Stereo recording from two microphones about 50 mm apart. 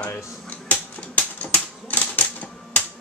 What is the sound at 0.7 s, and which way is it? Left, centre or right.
Typewriter, left.